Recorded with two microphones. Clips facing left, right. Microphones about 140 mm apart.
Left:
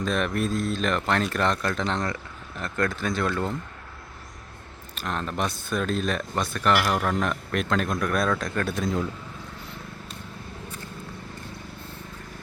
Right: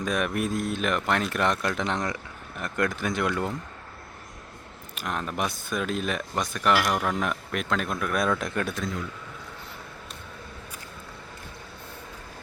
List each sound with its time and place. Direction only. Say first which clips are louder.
0.0 s speech: left 1 dB; 10° right (ahead or behind)
4.9 s speech: left 1 dB; 10° right (ahead or behind)